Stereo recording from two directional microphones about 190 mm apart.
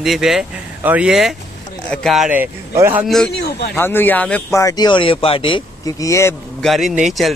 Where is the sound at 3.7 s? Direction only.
10° left (ahead or behind).